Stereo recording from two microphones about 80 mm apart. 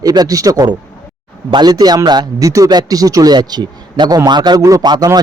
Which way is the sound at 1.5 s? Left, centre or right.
Right.